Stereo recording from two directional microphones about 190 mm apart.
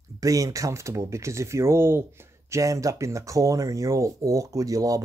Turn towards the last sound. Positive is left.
turn(degrees=-20)  # may be behind; listen again after turning